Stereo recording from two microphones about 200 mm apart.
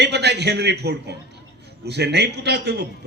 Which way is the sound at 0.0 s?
55° right (ahead or behind).